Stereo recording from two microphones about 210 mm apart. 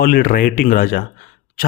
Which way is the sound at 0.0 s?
45° left (ahead or behind).